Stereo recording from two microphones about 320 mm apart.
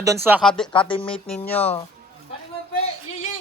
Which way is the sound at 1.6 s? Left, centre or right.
Centre.